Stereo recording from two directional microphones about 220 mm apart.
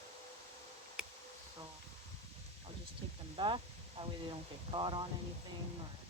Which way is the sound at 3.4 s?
20° right (ahead or behind).